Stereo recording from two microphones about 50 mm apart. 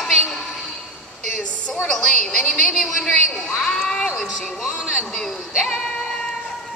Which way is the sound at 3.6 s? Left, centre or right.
Centre.